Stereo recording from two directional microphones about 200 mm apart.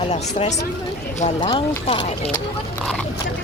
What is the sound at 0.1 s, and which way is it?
Speech, 30° left (ahead or behind).